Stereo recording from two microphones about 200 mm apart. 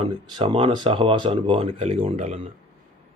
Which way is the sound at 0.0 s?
25° right (ahead or behind).